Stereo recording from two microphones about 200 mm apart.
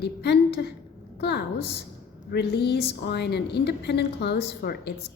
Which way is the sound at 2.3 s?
55° left (ahead or behind).